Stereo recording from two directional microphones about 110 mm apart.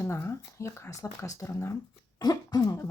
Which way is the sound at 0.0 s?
25° left (ahead or behind).